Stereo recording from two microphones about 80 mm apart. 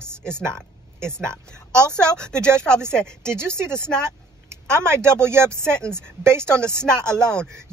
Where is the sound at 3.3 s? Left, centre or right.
Right.